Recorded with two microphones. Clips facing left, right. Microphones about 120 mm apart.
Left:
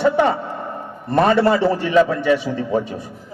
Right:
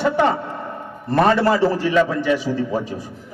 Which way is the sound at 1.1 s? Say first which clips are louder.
Left 1 dB; 25° left (ahead or behind).